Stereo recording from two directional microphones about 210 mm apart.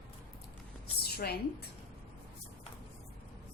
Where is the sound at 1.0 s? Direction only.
50° left (ahead or behind).